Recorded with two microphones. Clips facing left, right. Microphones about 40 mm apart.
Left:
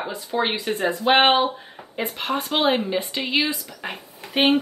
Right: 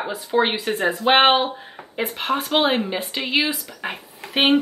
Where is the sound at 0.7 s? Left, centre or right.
Right.